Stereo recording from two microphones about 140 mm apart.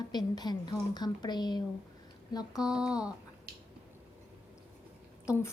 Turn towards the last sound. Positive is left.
turn(degrees=20)  # may be behind; listen again after turning